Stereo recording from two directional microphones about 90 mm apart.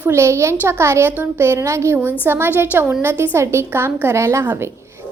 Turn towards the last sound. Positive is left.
turn(degrees=-25)  # may be behind; listen again after turning